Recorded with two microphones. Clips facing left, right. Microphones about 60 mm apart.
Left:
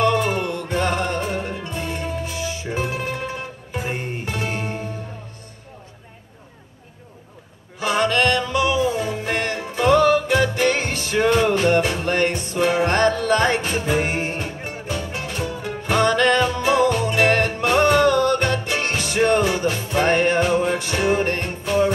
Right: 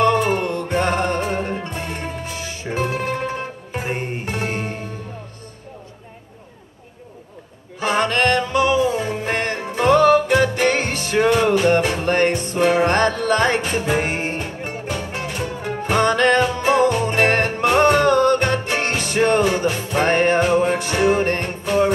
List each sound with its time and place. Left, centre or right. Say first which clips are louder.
0.0 s music: right 2 dB; right
7.8 s music: right 1 dB; right